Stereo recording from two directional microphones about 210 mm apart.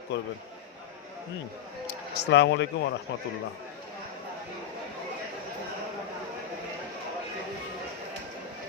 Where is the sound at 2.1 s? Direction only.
55° left (ahead or behind).